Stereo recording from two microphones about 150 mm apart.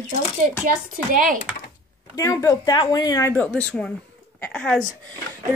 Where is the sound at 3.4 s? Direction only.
10° left (ahead or behind).